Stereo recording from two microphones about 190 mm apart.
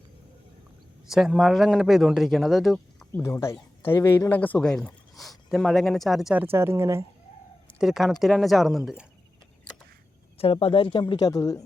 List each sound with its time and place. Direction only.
1.0 s speech: centre (ahead or behind)
7.8 s speech: centre (ahead or behind)
10.3 s speech: 30° left (ahead or behind)